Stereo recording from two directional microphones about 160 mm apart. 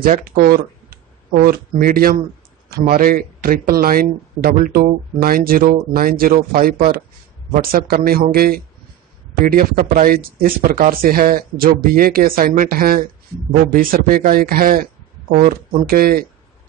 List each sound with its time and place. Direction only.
0.0 s speech: 65° right (ahead or behind)